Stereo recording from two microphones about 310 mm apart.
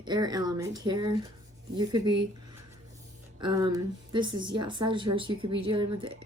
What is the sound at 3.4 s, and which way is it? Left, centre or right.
Speech, centre.